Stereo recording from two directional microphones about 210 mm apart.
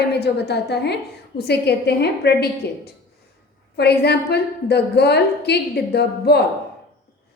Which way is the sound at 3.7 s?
50° left (ahead or behind).